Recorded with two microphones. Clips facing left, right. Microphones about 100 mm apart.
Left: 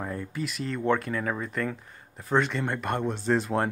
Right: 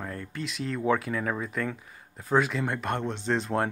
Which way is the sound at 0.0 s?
10° left (ahead or behind).